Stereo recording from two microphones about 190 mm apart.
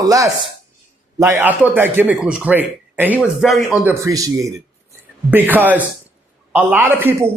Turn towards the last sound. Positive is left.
turn(degrees=-10)  # may be behind; listen again after turning